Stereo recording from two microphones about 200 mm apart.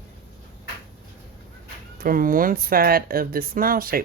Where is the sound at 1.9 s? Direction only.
45° right (ahead or behind).